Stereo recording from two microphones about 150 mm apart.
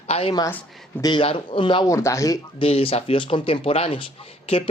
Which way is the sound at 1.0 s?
35° left (ahead or behind).